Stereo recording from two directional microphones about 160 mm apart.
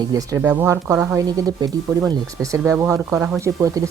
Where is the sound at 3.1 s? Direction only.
5° right (ahead or behind).